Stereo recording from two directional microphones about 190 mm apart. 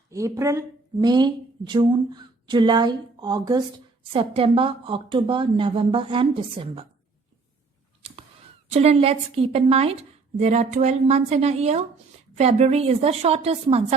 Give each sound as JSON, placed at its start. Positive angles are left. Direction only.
{"t": 0.1, "sound": "speech", "side_deg": -15}
{"t": 8.7, "sound": "a woman's voice", "side_deg": -35}